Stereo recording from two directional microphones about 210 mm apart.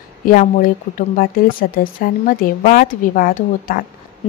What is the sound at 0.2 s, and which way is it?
A woman's voice, 40° left (ahead or behind).